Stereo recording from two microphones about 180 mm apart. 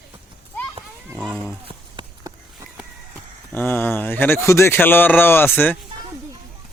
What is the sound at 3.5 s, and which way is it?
Speech, 10° left (ahead or behind).